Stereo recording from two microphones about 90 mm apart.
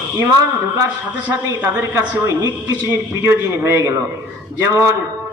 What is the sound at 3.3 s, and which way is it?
A man's voice, 30° right (ahead or behind).